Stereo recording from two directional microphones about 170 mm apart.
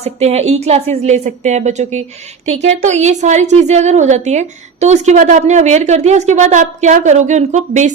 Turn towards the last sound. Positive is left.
turn(degrees=-45)  # may be behind; listen again after turning